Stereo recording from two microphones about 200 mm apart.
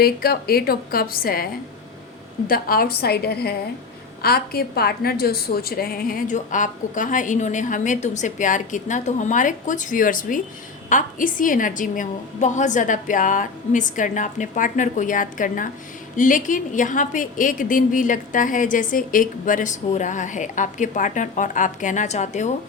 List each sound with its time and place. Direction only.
0.0 s a woman's voice: 50° left (ahead or behind)
2.5 s a woman's voice: 50° left (ahead or behind)